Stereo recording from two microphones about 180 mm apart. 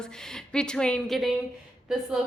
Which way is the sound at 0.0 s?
5° left (ahead or behind).